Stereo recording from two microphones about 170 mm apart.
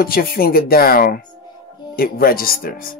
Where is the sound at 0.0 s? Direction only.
60° left (ahead or behind).